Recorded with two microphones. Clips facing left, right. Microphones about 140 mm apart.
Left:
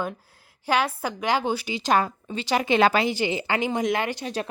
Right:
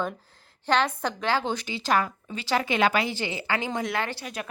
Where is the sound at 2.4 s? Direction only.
15° left (ahead or behind).